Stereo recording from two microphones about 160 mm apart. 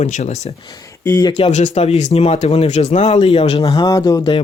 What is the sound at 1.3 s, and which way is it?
Speech, 40° left (ahead or behind).